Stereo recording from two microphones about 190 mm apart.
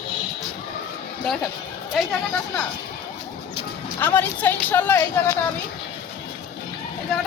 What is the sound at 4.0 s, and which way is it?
Speech, 10° left (ahead or behind).